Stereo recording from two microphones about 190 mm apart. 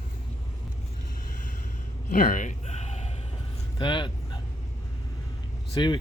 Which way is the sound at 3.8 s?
25° left (ahead or behind).